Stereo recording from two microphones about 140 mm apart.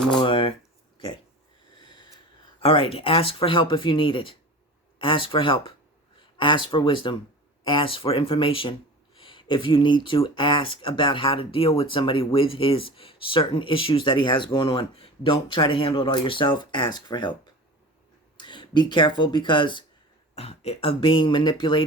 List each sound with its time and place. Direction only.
0.2 s a sound: 40° left (ahead or behind)
2.6 s speech: 40° left (ahead or behind)
20.3 s speech: 45° left (ahead or behind)